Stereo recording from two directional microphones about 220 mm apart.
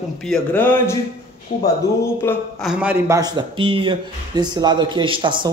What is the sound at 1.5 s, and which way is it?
Speech, 45° left (ahead or behind).